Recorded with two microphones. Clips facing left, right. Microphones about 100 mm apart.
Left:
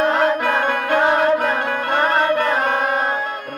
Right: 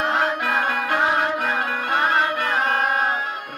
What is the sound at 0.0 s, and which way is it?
Music, 45° left (ahead or behind).